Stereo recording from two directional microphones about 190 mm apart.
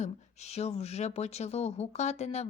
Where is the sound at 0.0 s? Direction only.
35° left (ahead or behind).